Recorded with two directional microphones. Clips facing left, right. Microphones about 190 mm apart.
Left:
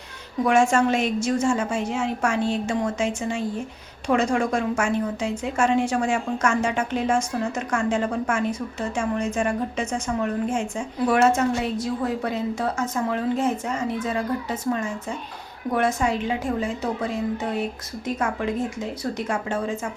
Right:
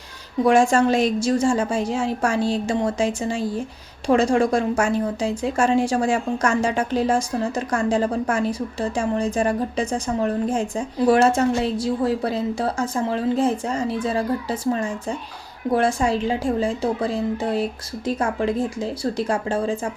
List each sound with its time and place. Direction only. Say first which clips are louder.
0.4 s a woman's voice: right 3 dB; 35° right (ahead or behind)